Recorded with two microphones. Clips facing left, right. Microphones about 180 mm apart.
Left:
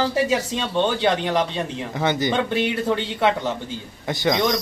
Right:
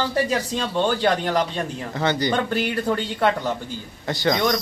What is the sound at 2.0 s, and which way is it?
Speech, 20° left (ahead or behind).